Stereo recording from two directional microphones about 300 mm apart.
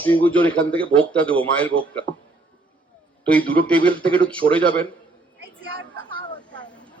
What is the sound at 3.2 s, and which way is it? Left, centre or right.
Speech, centre.